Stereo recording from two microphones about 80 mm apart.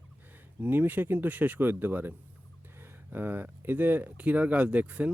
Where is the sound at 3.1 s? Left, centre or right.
Right.